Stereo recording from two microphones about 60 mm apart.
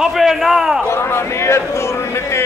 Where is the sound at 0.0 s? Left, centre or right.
Centre.